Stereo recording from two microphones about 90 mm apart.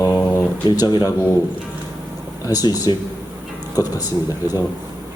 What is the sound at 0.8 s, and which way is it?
Speech, 55° left (ahead or behind).